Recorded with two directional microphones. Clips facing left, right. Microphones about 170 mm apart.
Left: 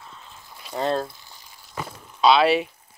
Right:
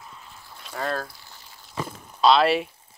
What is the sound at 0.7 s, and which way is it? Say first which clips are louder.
Speech: left 5 dB; 25° left (ahead or behind).